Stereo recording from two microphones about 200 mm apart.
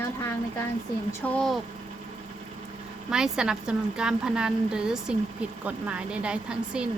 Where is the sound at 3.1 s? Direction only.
5° right (ahead or behind).